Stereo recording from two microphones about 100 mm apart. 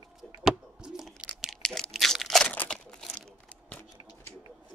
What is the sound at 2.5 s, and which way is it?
Crumpling, 10° left (ahead or behind).